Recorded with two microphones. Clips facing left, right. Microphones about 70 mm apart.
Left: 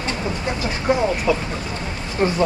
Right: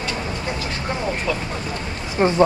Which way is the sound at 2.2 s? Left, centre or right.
Right.